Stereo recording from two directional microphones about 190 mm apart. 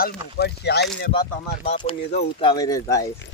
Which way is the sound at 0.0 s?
60° left (ahead or behind).